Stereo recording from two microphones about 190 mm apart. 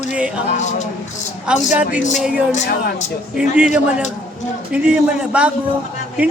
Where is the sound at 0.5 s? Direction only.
40° left (ahead or behind).